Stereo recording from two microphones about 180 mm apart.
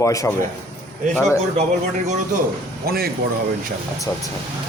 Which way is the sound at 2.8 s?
60° right (ahead or behind).